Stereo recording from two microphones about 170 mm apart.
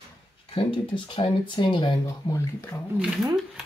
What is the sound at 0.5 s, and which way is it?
Speech, 30° left (ahead or behind).